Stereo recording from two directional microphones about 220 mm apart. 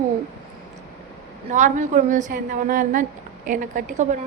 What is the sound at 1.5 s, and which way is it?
A woman's voice, 35° right (ahead or behind).